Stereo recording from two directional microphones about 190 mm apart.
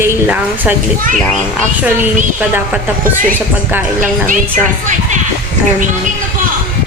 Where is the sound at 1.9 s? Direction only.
10° right (ahead or behind).